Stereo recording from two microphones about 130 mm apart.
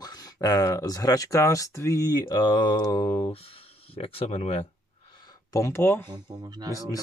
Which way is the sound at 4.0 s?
50° left (ahead or behind).